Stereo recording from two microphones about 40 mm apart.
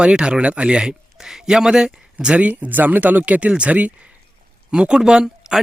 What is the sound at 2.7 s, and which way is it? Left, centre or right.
Speech, right.